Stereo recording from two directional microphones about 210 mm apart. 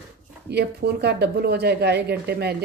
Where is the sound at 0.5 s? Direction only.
50° right (ahead or behind).